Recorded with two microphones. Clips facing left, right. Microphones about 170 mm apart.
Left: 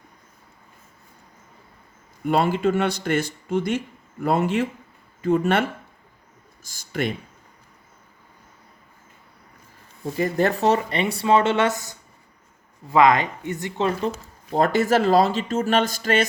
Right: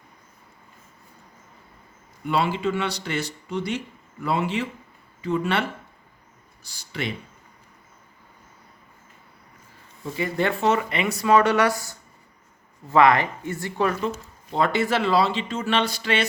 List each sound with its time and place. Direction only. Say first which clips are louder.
2.2 s speech: left 4 dB; 45° left (ahead or behind)
10.0 s speech: left 3 dB; 40° left (ahead or behind); by 13.9 s 20° left (ahead or behind)
14.5 s speech: left 3 dB; 45° left (ahead or behind)